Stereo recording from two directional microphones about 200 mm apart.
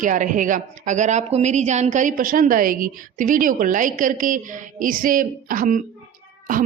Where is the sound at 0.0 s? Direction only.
40° right (ahead or behind).